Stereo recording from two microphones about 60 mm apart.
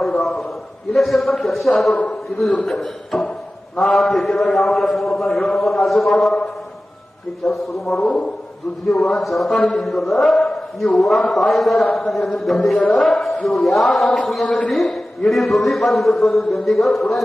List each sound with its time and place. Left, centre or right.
0.0 s a sound: centre
0.9 s a man's voice: centre
7.4 s a man's voice: centre
9.1 s a man's voice: centre
14.4 s a man's voice: centre
14.7 s a man's voice: centre